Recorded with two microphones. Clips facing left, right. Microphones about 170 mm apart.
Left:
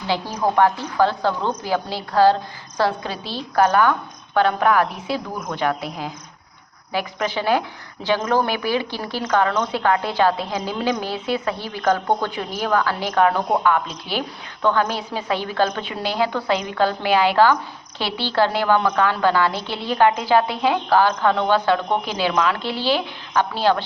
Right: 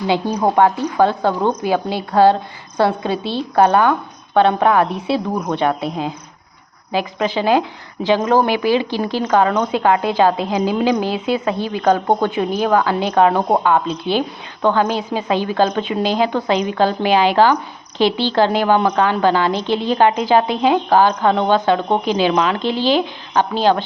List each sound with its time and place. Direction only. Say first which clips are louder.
0.1 s a woman's voice: right 4 dB; 20° right (ahead or behind)